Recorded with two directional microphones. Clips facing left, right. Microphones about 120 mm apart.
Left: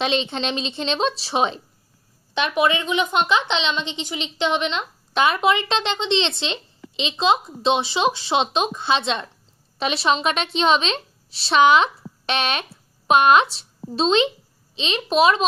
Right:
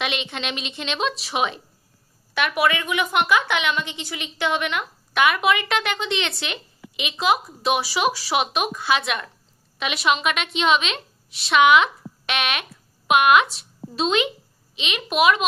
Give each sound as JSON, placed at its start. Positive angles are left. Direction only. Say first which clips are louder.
{"t": 0.0, "sound": "a woman's voice", "louder": "left 5 dB", "side_deg": 30}